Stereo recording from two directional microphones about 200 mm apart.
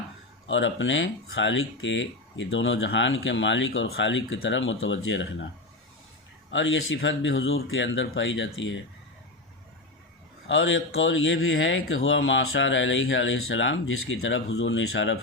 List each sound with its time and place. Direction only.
0.4 s speech: 65° left (ahead or behind)
6.5 s speech: 70° left (ahead or behind)
10.4 s a man's voice: 85° left